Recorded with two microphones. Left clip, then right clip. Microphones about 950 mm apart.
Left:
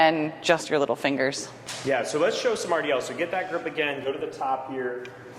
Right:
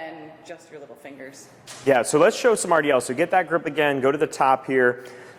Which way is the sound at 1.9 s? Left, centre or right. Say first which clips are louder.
Right 6 dB; right.